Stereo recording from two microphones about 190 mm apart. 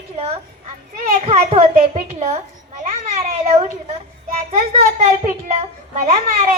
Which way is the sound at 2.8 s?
35° right (ahead or behind).